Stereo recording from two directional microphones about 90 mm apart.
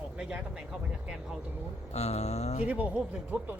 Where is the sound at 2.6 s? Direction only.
15° right (ahead or behind).